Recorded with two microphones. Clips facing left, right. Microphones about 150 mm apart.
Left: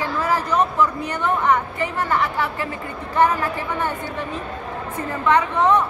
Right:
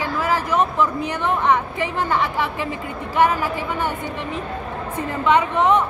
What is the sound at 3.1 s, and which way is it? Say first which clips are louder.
Speech: even; 10° right (ahead or behind).